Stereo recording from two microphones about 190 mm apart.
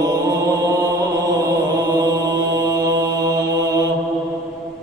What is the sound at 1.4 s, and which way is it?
Mantra, 20° right (ahead or behind).